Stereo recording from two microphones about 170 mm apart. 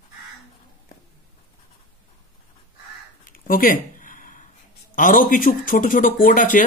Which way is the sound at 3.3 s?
55° left (ahead or behind).